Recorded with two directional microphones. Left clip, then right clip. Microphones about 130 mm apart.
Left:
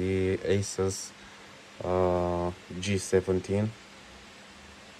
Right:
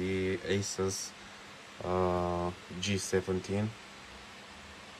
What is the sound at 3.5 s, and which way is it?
Speech, 10° right (ahead or behind).